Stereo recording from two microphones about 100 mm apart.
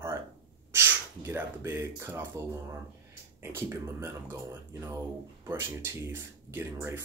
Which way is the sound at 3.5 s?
25° right (ahead or behind).